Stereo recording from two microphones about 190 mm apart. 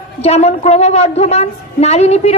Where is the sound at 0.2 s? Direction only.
35° left (ahead or behind).